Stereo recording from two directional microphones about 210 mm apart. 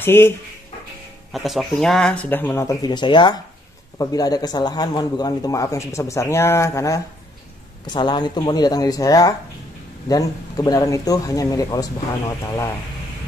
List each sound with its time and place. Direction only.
0.0 s speech: 10° left (ahead or behind)
1.3 s a man's voice: centre (ahead or behind)